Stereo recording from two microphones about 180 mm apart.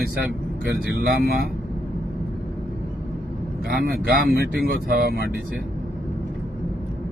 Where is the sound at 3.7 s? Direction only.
65° right (ahead or behind).